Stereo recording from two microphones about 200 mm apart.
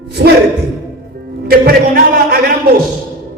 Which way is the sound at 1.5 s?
50° right (ahead or behind).